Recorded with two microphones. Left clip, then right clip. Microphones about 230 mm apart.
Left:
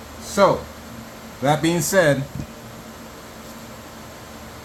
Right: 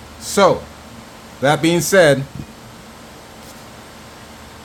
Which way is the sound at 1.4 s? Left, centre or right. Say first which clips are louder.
Right 4 dB; right.